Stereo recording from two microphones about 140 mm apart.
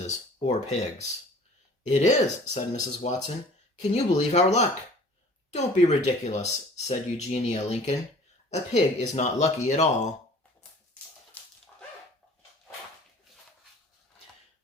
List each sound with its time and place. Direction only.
0.4 s speech: 55° left (ahead or behind)
11.4 s dog: 10° left (ahead or behind)